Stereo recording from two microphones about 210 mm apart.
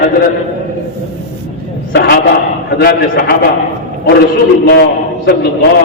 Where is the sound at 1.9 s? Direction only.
55° left (ahead or behind).